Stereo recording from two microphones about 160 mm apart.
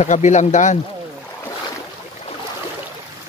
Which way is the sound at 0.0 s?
45° left (ahead or behind).